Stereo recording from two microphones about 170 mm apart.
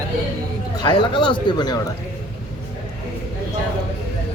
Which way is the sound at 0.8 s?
30° left (ahead or behind).